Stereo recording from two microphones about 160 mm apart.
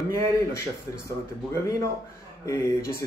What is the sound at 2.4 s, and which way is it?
Speech, 15° left (ahead or behind).